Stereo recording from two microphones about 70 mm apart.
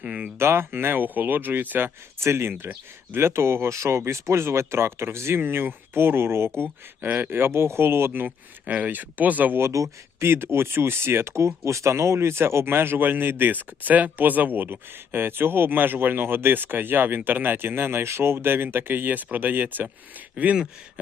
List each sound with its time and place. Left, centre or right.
0.0 s speech: centre
0.3 s speech: right
9.6 s speech: right
10.2 s speech: right; by 20.7 s centre